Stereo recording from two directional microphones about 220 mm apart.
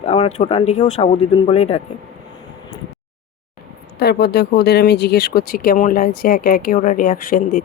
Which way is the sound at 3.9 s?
45° left (ahead or behind).